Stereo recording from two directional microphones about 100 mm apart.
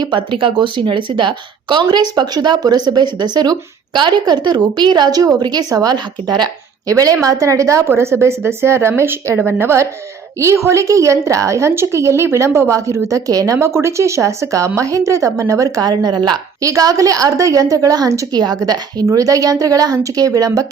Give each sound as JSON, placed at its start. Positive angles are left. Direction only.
{"t": 0.0, "sound": "speech", "side_deg": -55}